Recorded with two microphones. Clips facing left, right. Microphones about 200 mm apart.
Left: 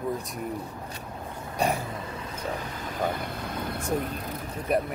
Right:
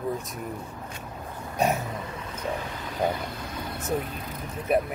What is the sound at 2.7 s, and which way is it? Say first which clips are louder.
Speech: right 3 dB; 45° left (ahead or behind).